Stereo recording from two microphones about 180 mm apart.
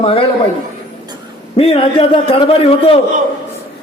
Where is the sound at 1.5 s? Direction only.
30° left (ahead or behind).